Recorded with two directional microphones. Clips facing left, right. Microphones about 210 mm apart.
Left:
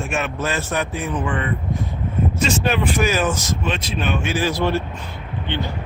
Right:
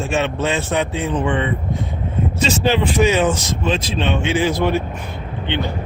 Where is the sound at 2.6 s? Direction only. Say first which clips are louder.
Right 6 dB; 25° right (ahead or behind).